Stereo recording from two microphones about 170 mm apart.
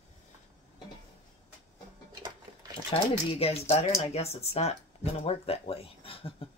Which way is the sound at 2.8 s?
35° left (ahead or behind).